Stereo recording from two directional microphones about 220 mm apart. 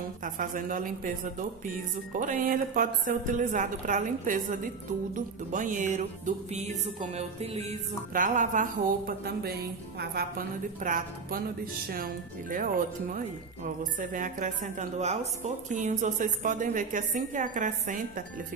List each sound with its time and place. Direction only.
0.2 s music: 35° right (ahead or behind)
2.1 s music: 35° right (ahead or behind)